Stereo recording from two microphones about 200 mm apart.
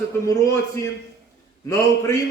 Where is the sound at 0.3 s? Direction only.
15° left (ahead or behind).